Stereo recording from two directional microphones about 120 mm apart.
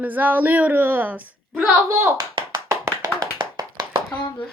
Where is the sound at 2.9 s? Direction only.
30° right (ahead or behind).